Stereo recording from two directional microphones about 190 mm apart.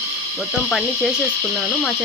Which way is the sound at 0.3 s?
Centre (ahead or behind).